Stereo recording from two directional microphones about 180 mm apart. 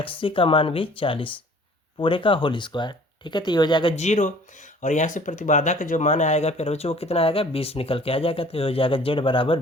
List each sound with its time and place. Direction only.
0.0 s speech: 30° left (ahead or behind)
3.9 s speech: 40° left (ahead or behind)